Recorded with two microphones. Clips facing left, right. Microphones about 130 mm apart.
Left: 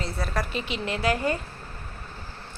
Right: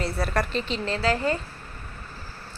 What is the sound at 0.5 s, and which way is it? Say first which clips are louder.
Speech: right 2 dB; 10° left (ahead or behind).